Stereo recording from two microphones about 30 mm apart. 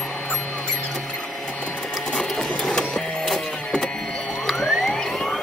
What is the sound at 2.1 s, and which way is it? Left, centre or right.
Sewing machine, left.